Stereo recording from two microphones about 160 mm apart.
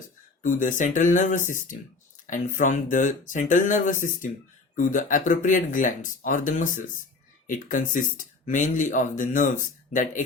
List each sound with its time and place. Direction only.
0.4 s speech: 55° left (ahead or behind)